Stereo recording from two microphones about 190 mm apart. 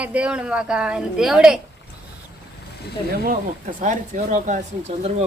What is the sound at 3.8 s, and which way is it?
Speech, 40° right (ahead or behind).